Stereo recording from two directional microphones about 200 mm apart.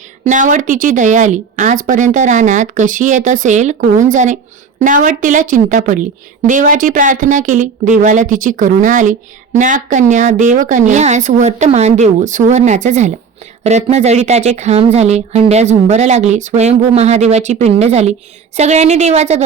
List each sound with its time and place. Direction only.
0.3 s a woman's voice: 40° right (ahead or behind)